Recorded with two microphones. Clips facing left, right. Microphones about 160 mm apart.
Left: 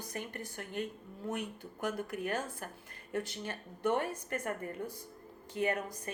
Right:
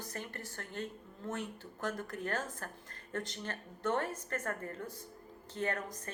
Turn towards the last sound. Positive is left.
turn(degrees=10)  # may be behind; listen again after turning